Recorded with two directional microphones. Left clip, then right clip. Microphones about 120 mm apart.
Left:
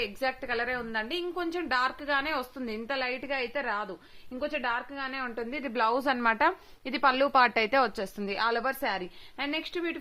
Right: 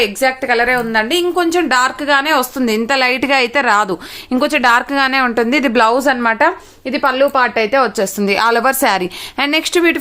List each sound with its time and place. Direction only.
0.0 s a woman's voice: centre (ahead or behind); by 3.8 s 55° right (ahead or behind)
4.3 s speech: 70° right (ahead or behind); by 5.5 s 50° right (ahead or behind)
6.1 s speech: 20° left (ahead or behind)
6.9 s a woman's voice: 45° left (ahead or behind)
8.2 s a woman's voice: 15° right (ahead or behind)
8.6 s a woman's voice: 35° right (ahead or behind)